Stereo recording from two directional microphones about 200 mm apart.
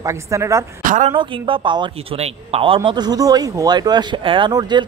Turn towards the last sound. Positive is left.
turn(degrees=-25)  # may be behind; listen again after turning